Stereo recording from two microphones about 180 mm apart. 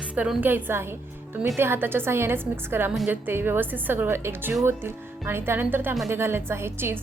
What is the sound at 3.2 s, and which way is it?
A woman's voice, 10° right (ahead or behind).